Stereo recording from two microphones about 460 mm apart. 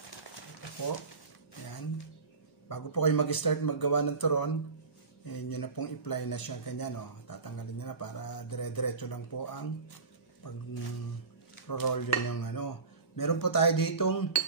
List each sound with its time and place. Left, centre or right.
2.7 s speech: left
11.6 s speech: left